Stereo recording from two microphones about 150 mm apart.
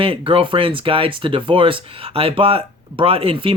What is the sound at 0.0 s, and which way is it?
Speech, 35° right (ahead or behind).